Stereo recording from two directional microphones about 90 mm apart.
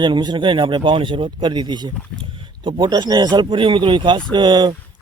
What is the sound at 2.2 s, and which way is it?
Speech, 65° right (ahead or behind).